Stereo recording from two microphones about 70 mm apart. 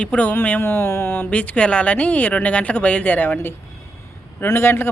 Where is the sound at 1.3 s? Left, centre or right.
Centre.